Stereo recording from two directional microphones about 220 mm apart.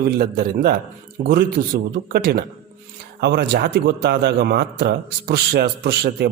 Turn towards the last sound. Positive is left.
turn(degrees=-45)  # may be behind; listen again after turning